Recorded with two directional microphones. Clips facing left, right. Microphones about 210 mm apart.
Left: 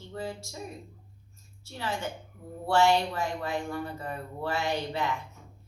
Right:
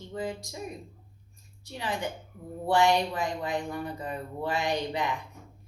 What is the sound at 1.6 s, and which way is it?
Speech, 15° right (ahead or behind).